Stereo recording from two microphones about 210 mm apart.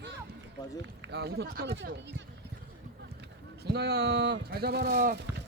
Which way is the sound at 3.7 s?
50° right (ahead or behind).